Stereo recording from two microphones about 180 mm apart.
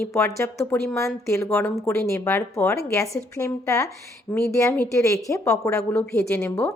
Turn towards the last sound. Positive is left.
turn(degrees=10)  # may be behind; listen again after turning